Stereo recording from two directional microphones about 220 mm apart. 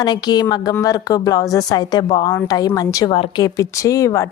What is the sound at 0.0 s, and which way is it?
A woman's voice, 20° left (ahead or behind).